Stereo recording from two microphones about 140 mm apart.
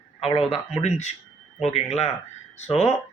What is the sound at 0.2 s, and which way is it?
A man's voice, 45° left (ahead or behind).